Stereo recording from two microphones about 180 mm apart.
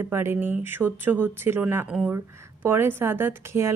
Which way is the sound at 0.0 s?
15° right (ahead or behind).